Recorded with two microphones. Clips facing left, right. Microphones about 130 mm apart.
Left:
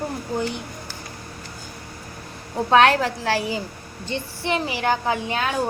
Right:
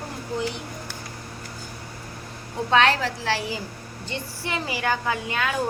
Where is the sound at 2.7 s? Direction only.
50° left (ahead or behind).